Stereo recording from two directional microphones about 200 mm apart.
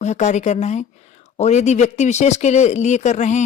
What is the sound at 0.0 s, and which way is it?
Speech, 35° left (ahead or behind).